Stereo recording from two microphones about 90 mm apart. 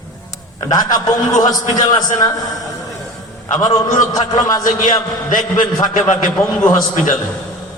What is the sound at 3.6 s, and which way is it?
A man's voice, 45° left (ahead or behind).